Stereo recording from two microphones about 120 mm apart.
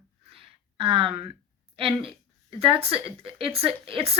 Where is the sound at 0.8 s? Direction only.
50° right (ahead or behind).